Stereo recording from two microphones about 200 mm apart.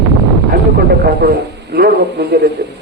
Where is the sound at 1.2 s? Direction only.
50° right (ahead or behind).